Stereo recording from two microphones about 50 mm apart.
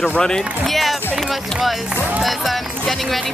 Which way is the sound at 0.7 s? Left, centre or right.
Centre.